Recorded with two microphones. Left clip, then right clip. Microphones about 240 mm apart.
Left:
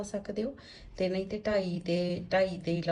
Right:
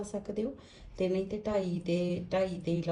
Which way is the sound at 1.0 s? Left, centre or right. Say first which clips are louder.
Left 1 dB; centre.